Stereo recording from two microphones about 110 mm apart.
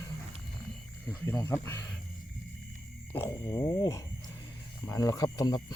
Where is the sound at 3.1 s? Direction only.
20° left (ahead or behind).